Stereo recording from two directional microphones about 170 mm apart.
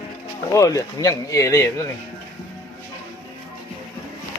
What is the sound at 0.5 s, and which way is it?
Speech, 20° left (ahead or behind).